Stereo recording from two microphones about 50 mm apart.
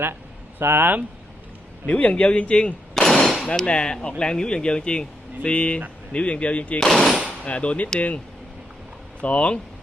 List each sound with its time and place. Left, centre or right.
0.6 s speech: right
1.9 s speech: left
2.9 s a sound: centre
3.4 s hammer: centre
4.2 s speech: centre
6.7 s hammer: centre
7.3 s speech: left
9.2 s speech: left